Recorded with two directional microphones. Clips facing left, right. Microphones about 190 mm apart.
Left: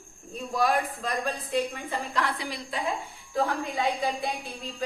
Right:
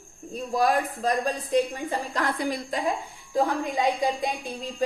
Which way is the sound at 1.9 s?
45° right (ahead or behind).